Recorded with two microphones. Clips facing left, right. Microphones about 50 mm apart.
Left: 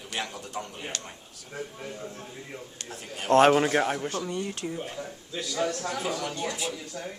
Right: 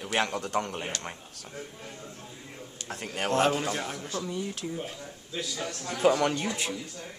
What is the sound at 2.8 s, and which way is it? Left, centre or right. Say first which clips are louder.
Speech: right 7 dB; right.